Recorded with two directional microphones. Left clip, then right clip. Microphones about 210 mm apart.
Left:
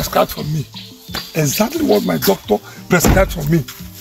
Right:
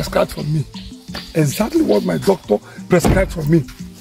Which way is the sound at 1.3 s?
15° right (ahead or behind).